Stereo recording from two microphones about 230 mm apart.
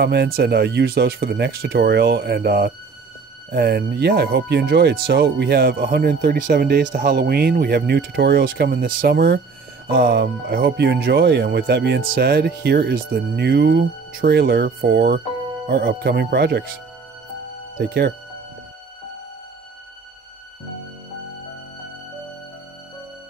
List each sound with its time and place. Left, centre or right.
0.0 s speech: right
17.7 s speech: right